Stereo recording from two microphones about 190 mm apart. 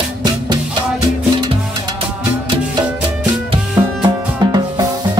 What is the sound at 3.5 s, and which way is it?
Music, 25° right (ahead or behind).